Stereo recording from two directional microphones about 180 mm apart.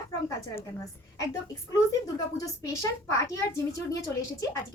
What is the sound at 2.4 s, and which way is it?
Speech, 15° left (ahead or behind).